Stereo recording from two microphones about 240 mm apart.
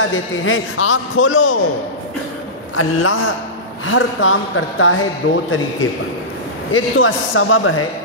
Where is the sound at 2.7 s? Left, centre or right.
Left.